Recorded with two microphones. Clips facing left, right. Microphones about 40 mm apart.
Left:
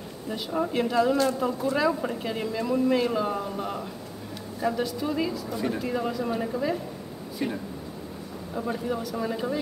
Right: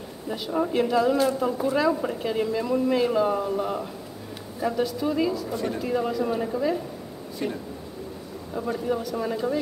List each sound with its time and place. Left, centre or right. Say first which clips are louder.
0.3 s a woman's voice: right 2 dB; centre
8.8 s a woman's voice: right 2 dB; centre